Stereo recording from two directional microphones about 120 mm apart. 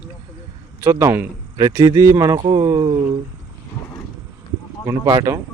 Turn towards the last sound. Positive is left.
turn(degrees=-20)  # may be behind; listen again after turning